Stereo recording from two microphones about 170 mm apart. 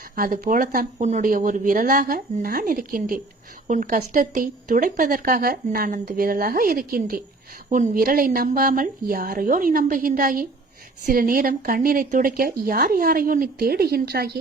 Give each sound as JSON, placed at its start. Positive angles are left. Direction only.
{"t": 0.2, "sound": "speech", "side_deg": -55}